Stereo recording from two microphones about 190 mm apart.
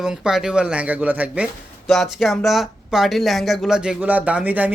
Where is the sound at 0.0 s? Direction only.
Centre (ahead or behind).